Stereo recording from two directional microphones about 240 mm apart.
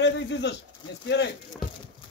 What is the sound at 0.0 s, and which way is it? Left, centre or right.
Speech, left.